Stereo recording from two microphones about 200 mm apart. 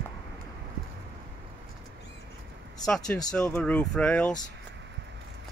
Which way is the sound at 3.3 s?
5° left (ahead or behind).